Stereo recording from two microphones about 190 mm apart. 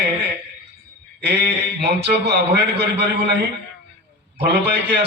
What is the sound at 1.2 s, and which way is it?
A man's voice, 60° right (ahead or behind).